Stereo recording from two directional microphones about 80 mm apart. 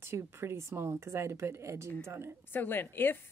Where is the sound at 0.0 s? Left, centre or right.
Right.